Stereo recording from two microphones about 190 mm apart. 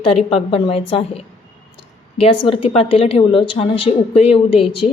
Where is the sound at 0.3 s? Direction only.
30° left (ahead or behind).